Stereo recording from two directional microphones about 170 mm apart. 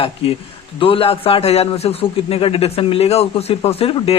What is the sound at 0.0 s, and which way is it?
A man's voice, 35° left (ahead or behind).